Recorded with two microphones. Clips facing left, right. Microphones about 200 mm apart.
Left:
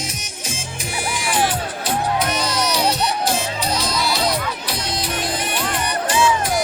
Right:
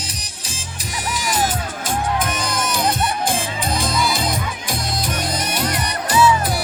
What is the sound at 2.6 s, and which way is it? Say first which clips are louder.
Music: even; 50° right (ahead or behind).